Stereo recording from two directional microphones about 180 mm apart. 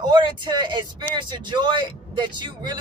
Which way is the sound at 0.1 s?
25° right (ahead or behind).